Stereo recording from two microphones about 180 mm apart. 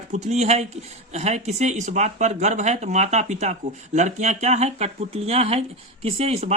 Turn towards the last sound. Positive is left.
turn(degrees=-35)  # may be behind; listen again after turning